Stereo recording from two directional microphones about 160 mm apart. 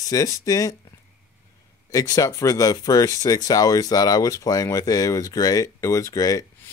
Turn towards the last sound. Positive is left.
turn(degrees=20)  # may be behind; listen again after turning